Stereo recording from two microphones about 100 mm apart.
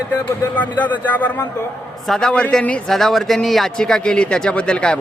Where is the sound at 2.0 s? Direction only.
5° left (ahead or behind).